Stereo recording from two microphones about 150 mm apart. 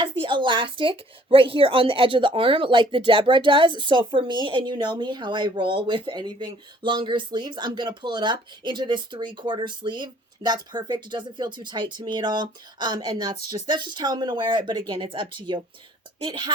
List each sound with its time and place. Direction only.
0.0 s a woman's voice: 35° right (ahead or behind)